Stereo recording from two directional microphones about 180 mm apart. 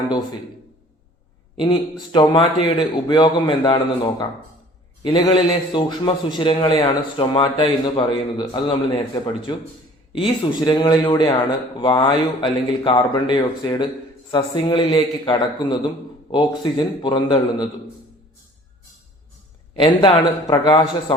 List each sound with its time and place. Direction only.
0.1 s a man's voice: 20° left (ahead or behind)
1.5 s a man's voice: 25° left (ahead or behind)
19.7 s a man's voice: 30° left (ahead or behind)